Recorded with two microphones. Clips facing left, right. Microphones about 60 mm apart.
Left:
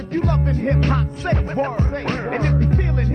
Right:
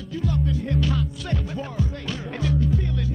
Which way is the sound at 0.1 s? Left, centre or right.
Left.